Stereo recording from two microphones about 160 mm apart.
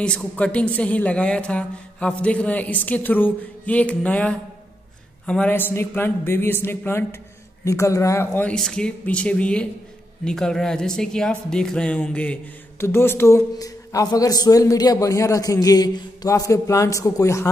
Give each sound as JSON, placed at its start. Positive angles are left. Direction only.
{"t": 0.0, "sound": "a man's voice", "side_deg": 5}